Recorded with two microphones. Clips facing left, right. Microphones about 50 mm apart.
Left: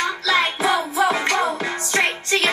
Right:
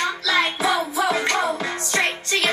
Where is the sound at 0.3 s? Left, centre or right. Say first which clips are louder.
Left 2 dB; left.